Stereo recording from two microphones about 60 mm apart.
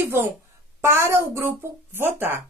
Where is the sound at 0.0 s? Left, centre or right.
Right.